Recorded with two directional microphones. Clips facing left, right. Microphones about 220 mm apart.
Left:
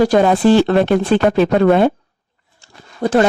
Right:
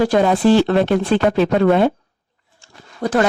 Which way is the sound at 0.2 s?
55° left (ahead or behind).